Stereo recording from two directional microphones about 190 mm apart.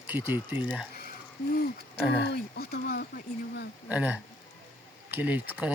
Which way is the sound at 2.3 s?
60° left (ahead or behind).